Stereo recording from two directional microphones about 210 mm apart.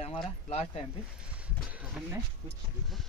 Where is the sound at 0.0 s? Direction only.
30° left (ahead or behind).